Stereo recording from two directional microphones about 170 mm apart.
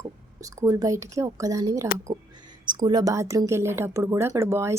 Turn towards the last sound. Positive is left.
turn(degrees=-15)  # may be behind; listen again after turning